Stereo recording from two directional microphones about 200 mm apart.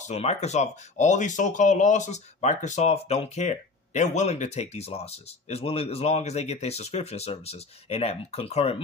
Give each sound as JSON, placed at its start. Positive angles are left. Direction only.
{"t": 0.0, "sound": "speech", "side_deg": 35}